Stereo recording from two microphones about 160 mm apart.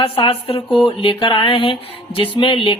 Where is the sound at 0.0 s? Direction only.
35° left (ahead or behind).